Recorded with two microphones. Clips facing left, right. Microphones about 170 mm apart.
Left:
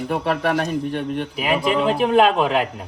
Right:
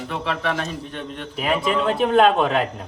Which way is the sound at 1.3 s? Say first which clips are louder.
Even; 5° left (ahead or behind).